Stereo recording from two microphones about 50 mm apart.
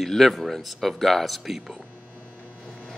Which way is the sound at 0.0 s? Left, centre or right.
Centre.